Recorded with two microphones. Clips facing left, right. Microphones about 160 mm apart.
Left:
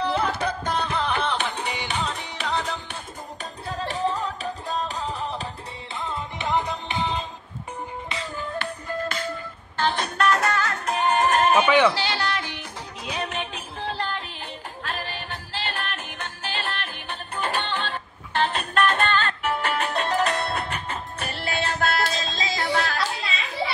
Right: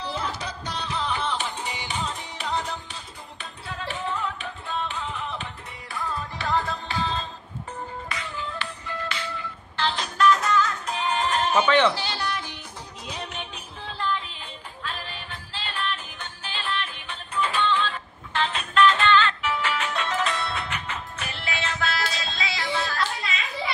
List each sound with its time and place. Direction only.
0.0 s music: 60° left (ahead or behind); by 3.0 s 85° left
3.6 s music: 35° left (ahead or behind)
5.9 s music: 20° left (ahead or behind)
8.4 s music: 45° left (ahead or behind); by 11.0 s 70° left (ahead or behind)
11.0 s music: 45° left (ahead or behind)
11.5 s speech: 10° left (ahead or behind)
11.9 s music: 90° left; by 20.6 s 50° left (ahead or behind)
20.6 s music: 35° left (ahead or behind)
21.8 s music: 50° left (ahead or behind)
22.8 s a sound: 70° left (ahead or behind)
23.2 s a sound: 35° left (ahead or behind)